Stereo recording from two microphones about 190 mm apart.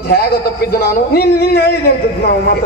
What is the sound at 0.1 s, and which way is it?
A man's voice, 55° left (ahead or behind).